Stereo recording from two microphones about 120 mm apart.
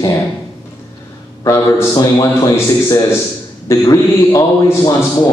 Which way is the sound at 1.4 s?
25° left (ahead or behind).